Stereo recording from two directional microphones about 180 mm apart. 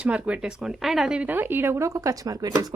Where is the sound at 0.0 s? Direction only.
5° right (ahead or behind).